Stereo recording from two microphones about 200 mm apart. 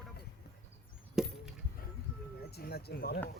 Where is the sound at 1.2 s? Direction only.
5° right (ahead or behind).